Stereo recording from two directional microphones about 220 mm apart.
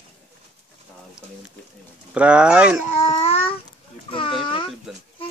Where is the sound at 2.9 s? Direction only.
30° left (ahead or behind).